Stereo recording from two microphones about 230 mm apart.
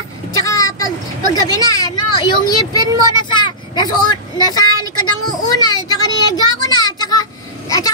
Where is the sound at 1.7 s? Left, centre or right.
Centre.